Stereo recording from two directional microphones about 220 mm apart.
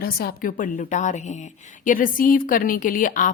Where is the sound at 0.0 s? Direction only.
45° left (ahead or behind).